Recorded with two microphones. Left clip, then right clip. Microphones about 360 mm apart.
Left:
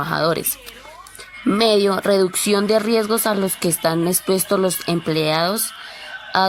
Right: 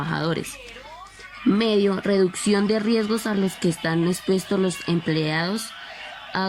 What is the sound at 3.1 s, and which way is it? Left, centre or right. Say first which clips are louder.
Speech: left 6 dB; centre.